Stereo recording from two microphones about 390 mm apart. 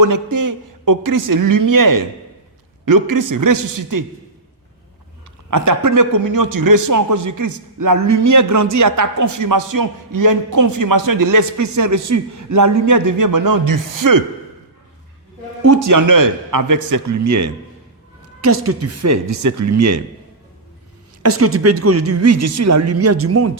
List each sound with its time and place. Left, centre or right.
0.0 s a man's voice: right
5.5 s a man's voice: right
15.6 s a man's voice: right
21.2 s a woman's voice: right